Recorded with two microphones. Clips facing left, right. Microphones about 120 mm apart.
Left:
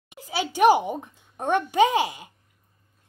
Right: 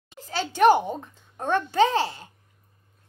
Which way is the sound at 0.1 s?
10° left (ahead or behind).